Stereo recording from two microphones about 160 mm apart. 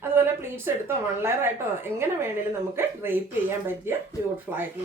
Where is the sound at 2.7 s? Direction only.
15° right (ahead or behind).